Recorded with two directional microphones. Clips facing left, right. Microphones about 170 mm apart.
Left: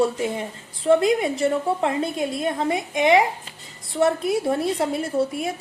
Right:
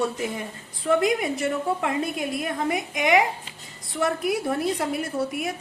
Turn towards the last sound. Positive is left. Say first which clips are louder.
# left 4 dB
turn(degrees=30)  # may be behind; listen again after turning